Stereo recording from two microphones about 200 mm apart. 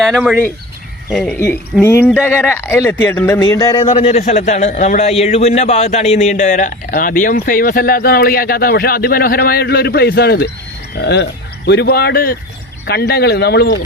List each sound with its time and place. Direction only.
0.0 s speech: centre (ahead or behind); by 3.8 s 20° left (ahead or behind)
3.9 s a man's voice: 30° left (ahead or behind); by 13.7 s 55° left (ahead or behind)